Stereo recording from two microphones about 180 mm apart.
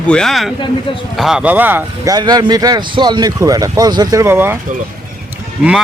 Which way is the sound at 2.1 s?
25° right (ahead or behind).